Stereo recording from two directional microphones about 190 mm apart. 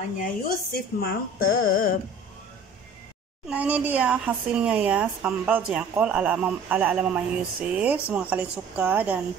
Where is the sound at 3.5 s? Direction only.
10° right (ahead or behind).